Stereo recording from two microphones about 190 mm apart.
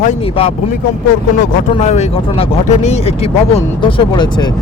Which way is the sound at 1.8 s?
35° left (ahead or behind).